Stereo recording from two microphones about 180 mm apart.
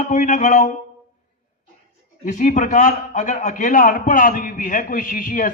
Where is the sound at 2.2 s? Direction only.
45° left (ahead or behind).